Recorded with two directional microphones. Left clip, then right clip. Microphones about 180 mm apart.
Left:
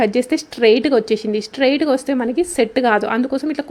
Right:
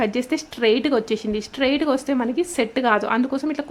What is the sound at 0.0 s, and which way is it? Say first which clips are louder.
Speech: left 6 dB; 15° left (ahead or behind).